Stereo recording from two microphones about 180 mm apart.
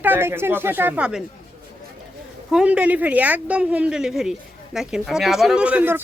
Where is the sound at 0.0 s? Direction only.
10° right (ahead or behind).